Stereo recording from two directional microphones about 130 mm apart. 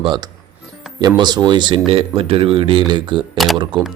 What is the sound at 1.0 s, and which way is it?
Speech, 30° right (ahead or behind).